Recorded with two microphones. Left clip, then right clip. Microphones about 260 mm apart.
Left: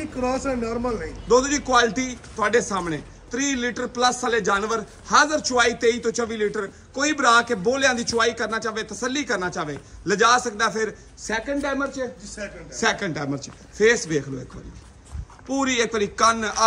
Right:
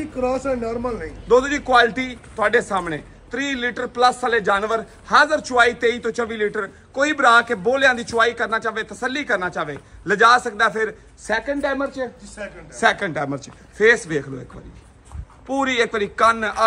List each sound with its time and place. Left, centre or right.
0.2 s a man's voice: left
1.2 s a man's voice: centre
15.4 s a man's voice: centre